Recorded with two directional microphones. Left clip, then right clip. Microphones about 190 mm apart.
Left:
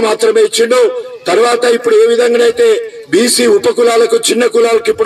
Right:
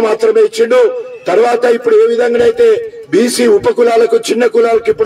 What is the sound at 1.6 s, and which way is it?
Speech, 40° left (ahead or behind).